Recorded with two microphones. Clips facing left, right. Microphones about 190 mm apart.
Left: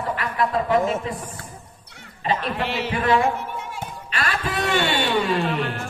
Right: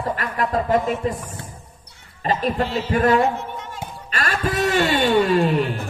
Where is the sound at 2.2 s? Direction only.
40° right (ahead or behind).